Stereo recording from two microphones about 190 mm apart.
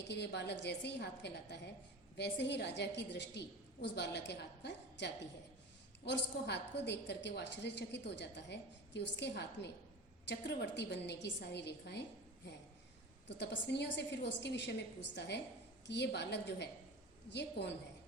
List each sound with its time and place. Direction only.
0.1 s a woman's voice: 65° left (ahead or behind)
13.2 s a woman's voice: 65° left (ahead or behind)